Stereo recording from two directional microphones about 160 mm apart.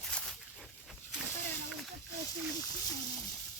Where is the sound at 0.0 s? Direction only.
Centre (ahead or behind).